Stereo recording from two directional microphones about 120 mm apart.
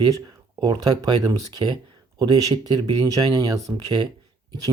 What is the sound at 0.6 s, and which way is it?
Speech, 35° right (ahead or behind).